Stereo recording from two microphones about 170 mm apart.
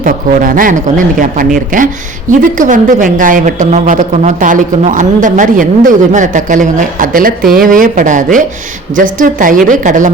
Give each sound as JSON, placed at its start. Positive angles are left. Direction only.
{"t": 0.0, "sound": "a woman's voice", "side_deg": -55}